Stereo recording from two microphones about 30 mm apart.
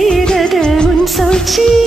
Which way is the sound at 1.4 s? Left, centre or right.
Centre.